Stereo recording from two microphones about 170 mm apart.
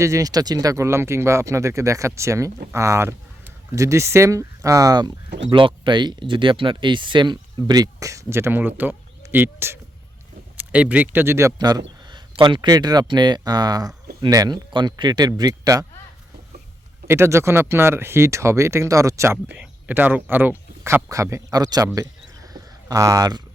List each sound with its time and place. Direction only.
0.0 s speech: 20° right (ahead or behind)
17.1 s speech: 15° right (ahead or behind)
22.5 s a sound: 20° right (ahead or behind)